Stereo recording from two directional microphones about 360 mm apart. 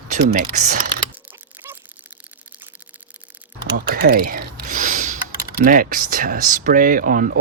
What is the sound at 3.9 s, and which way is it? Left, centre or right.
Computer keyboard, right.